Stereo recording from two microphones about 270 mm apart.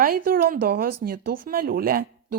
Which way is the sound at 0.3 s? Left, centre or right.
Right.